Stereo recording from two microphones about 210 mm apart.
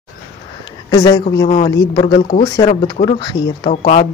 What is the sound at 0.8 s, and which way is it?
Speech, 15° left (ahead or behind).